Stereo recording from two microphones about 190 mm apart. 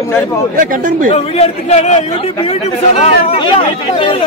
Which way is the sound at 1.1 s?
35° left (ahead or behind).